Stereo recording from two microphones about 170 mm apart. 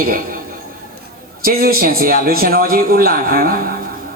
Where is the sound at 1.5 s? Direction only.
60° right (ahead or behind).